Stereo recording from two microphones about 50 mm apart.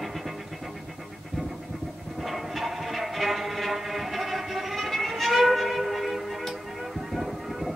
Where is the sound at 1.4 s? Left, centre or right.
Centre.